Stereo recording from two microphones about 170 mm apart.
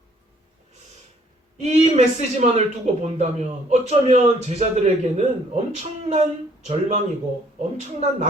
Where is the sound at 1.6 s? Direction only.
40° right (ahead or behind).